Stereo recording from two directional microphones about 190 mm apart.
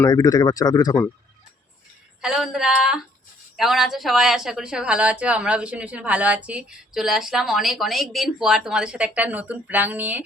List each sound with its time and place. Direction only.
0.0 s speech: 20° left (ahead or behind)
2.2 s speech: 5° right (ahead or behind)